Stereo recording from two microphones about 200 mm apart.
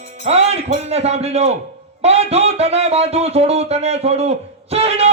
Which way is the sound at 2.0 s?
30° right (ahead or behind).